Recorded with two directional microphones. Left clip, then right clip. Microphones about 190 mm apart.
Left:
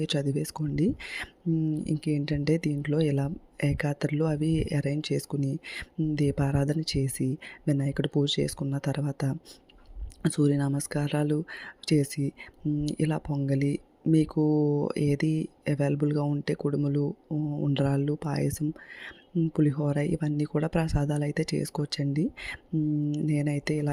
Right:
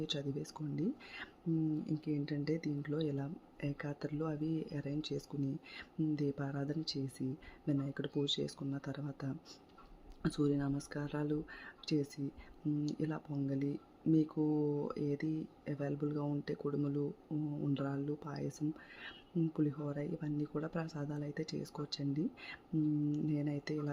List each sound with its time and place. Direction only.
0.0 s speech: 45° left (ahead or behind)